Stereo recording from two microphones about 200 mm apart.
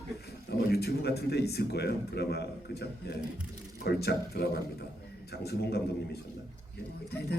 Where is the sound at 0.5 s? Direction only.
50° left (ahead or behind).